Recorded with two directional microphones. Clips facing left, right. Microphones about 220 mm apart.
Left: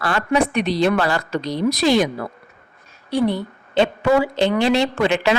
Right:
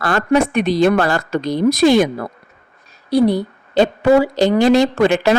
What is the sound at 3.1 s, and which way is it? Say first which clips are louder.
A woman's voice: right 5 dB; 40° right (ahead or behind).